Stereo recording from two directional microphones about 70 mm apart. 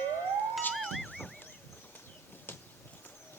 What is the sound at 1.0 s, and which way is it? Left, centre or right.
Goose, centre.